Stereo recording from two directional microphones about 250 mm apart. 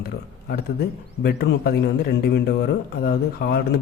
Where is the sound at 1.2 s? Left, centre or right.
Left.